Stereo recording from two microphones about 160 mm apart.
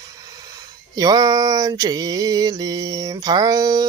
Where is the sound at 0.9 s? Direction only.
25° right (ahead or behind).